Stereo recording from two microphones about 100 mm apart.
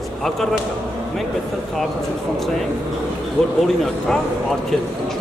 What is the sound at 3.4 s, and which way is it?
Speech, 5° left (ahead or behind).